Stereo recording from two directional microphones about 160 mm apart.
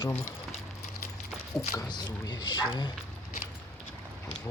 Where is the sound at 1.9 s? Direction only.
25° left (ahead or behind).